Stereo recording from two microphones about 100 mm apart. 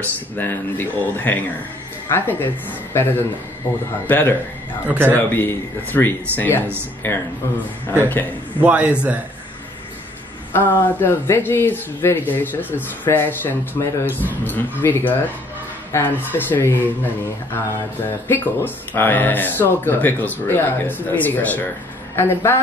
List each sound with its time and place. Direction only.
0.0 s speech: 20° left (ahead or behind)
4.8 s a man's voice: 20° right (ahead or behind)
5.3 s speech: 20° left (ahead or behind)
8.5 s a man's voice: 15° right (ahead or behind)
10.5 s speech: 20° left (ahead or behind)